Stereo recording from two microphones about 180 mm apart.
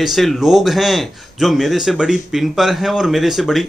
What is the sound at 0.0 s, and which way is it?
A man's voice, centre (ahead or behind).